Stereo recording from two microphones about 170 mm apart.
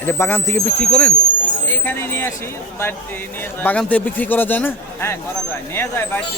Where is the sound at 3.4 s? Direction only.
10° left (ahead or behind).